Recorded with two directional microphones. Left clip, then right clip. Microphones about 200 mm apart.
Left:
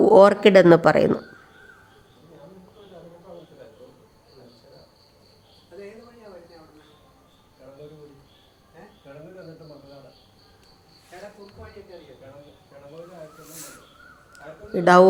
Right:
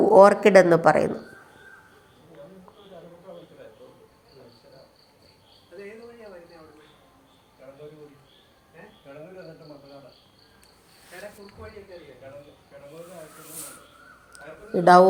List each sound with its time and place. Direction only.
0.0 s speech: 35° left (ahead or behind)
9.1 s cricket: 45° left (ahead or behind)
14.7 s a man's voice: 10° left (ahead or behind)